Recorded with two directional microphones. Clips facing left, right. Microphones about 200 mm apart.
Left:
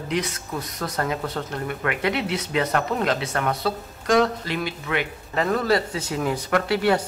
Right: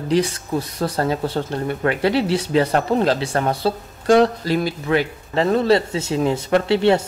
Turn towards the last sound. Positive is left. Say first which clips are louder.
# right 5 dB
turn(degrees=-25)  # may be behind; listen again after turning